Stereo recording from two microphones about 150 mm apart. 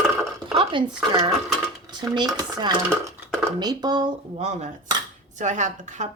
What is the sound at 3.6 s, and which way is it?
Speech, 25° right (ahead or behind).